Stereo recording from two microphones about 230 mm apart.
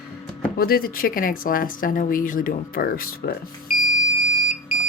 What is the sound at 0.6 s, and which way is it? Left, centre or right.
Speech, left.